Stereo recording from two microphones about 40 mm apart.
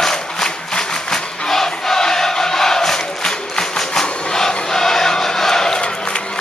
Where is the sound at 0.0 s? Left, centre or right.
Centre.